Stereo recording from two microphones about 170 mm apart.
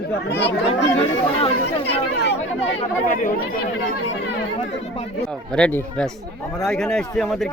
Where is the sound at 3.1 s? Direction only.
50° left (ahead or behind).